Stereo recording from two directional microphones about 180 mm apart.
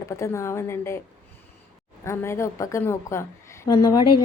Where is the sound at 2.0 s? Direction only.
15° left (ahead or behind).